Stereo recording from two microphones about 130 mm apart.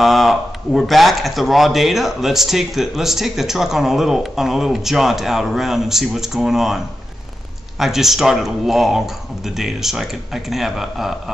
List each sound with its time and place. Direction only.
0.0 s speech: centre (ahead or behind)
7.8 s speech: centre (ahead or behind)